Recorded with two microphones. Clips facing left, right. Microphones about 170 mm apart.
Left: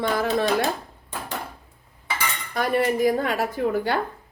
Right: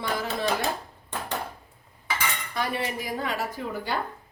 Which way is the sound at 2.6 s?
50° left (ahead or behind).